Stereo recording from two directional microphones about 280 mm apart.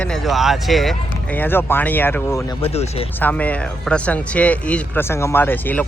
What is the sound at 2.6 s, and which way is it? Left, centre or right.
Speech, left.